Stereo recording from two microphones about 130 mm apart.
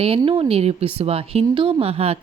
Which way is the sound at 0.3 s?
45° right (ahead or behind).